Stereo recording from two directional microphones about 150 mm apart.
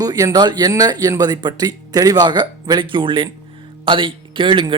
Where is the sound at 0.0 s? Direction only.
25° right (ahead or behind).